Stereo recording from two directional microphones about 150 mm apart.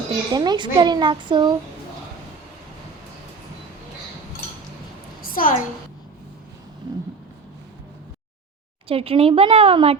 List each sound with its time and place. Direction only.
0.3 s speech: 30° right (ahead or behind)
5.2 s a sound: 65° left (ahead or behind)
8.9 s speech: 40° right (ahead or behind)